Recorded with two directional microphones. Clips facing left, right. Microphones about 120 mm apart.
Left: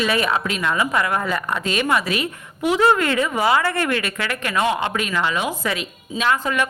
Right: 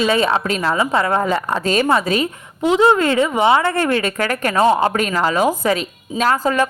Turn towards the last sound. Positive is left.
turn(degrees=-35)  # may be behind; listen again after turning